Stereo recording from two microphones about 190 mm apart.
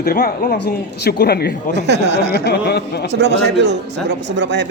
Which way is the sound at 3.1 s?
65° right (ahead or behind).